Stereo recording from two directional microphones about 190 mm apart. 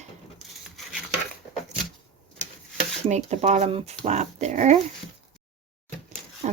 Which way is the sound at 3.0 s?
35° right (ahead or behind).